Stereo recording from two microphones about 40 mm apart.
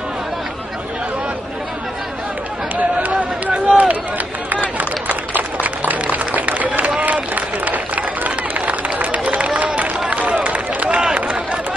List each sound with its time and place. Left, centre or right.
3.0 s run: right
5.3 s a sound: right
10.0 s run: right